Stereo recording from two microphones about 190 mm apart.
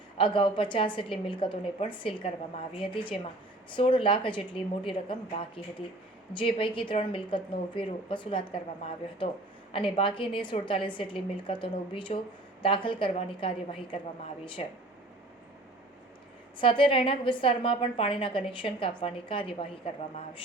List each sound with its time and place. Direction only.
0.2 s a woman's voice: 25° left (ahead or behind)
16.6 s a woman's voice: 25° left (ahead or behind)